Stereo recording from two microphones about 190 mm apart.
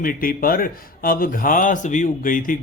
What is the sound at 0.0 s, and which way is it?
A man's voice, 50° left (ahead or behind).